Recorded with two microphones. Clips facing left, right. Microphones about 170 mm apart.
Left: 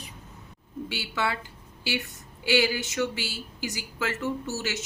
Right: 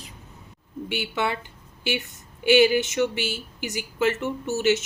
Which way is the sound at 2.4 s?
20° right (ahead or behind).